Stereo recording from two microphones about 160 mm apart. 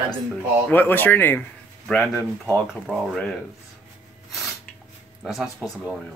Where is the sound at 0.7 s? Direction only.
10° left (ahead or behind).